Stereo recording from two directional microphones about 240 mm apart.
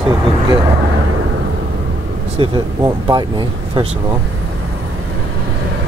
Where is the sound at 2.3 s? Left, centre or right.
Centre.